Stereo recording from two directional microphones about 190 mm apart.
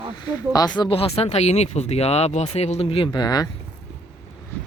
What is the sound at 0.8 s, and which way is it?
Speech, 30° left (ahead or behind).